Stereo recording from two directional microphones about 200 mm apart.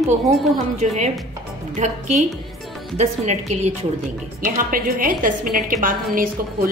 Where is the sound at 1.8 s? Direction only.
35° right (ahead or behind).